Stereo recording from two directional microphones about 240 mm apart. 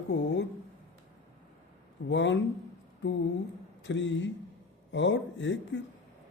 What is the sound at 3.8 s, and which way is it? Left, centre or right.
A man's voice, left.